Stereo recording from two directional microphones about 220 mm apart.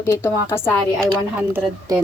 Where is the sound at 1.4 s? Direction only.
10° right (ahead or behind).